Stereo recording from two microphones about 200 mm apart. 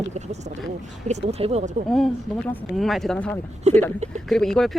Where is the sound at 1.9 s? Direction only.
Centre (ahead or behind).